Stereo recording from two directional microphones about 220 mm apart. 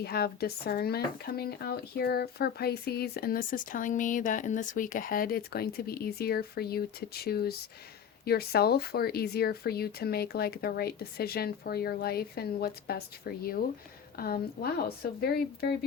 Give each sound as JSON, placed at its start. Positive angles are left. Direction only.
{"t": 0.0, "sound": "speech", "side_deg": 45}